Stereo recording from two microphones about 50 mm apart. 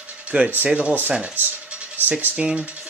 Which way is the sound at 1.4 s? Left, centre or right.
Right.